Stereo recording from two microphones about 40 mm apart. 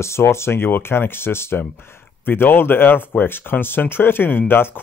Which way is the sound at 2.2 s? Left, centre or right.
Left.